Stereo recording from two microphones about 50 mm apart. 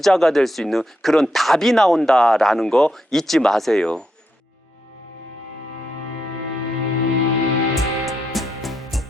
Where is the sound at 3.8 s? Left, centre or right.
Centre.